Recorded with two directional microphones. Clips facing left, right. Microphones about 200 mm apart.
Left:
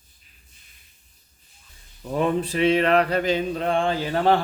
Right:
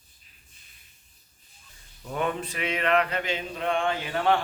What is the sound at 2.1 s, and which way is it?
Mantra, 35° left (ahead or behind).